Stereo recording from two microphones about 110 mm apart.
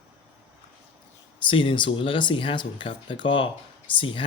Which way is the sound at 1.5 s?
50° left (ahead or behind).